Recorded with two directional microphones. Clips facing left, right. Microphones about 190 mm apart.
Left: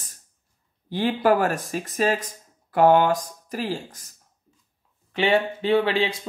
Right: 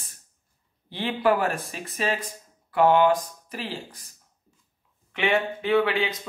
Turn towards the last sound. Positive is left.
turn(degrees=30)  # may be behind; listen again after turning